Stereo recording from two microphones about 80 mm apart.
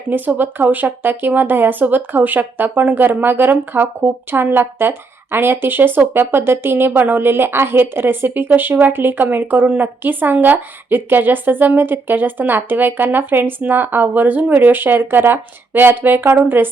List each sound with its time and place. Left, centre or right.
0.1 s speech: right